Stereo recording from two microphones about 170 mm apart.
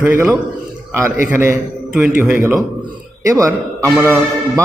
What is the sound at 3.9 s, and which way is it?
Speech, 10° right (ahead or behind).